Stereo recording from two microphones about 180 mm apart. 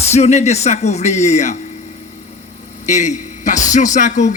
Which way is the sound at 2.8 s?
40° left (ahead or behind).